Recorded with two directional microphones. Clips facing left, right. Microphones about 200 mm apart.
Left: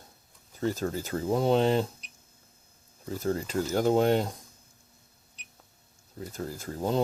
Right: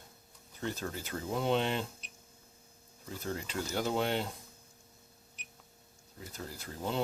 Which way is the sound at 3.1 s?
40° left (ahead or behind).